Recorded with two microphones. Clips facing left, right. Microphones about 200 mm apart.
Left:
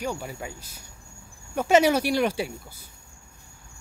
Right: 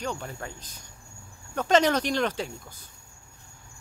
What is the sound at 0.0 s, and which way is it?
Speech, 10° left (ahead or behind).